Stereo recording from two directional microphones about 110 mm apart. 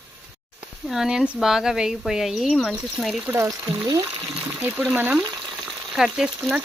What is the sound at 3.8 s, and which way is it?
Speech, 30° right (ahead or behind).